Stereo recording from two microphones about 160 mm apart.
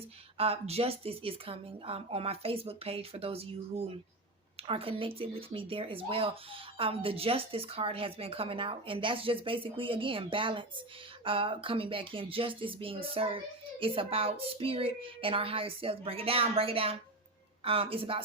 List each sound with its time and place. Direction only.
0.3 s speech: 35° right (ahead or behind)